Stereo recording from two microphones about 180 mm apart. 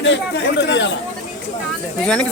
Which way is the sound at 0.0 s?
80° left.